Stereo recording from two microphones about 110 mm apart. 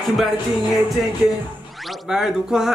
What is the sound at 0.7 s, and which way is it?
Speech, centre (ahead or behind).